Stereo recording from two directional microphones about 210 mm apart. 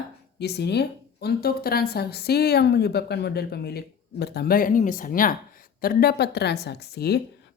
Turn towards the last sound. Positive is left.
turn(degrees=50)  # may be behind; listen again after turning